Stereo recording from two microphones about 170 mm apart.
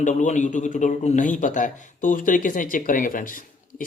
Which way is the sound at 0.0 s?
45° left (ahead or behind).